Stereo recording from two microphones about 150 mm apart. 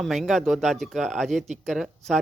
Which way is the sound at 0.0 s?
Centre (ahead or behind).